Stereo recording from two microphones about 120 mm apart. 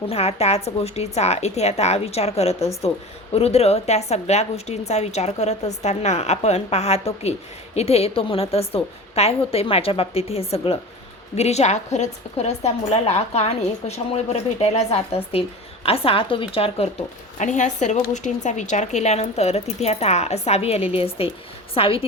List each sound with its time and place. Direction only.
0.1 s a woman's voice: 60° left (ahead or behind)
11.3 s a woman's voice: 65° left (ahead or behind)
17.3 s a woman's voice: 90° left; by 22.0 s 50° left (ahead or behind)